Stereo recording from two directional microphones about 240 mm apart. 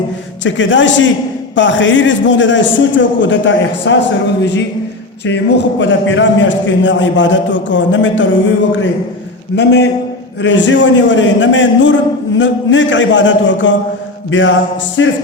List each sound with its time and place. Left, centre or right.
0.4 s a man's voice: left
5.2 s a man's voice: left